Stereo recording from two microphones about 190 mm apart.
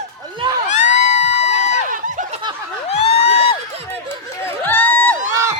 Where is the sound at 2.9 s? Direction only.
35° left (ahead or behind).